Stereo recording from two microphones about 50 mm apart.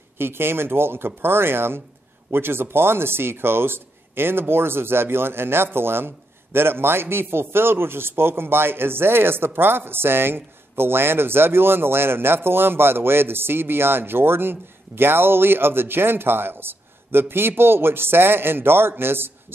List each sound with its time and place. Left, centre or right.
0.2 s a man's voice: right